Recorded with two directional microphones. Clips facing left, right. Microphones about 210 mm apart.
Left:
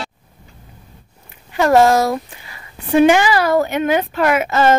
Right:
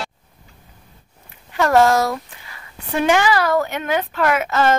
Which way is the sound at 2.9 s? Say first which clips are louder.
Left 5 dB; 10° left (ahead or behind).